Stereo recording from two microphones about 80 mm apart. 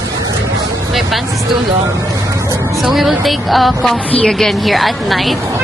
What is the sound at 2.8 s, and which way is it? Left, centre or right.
A woman's voice, centre.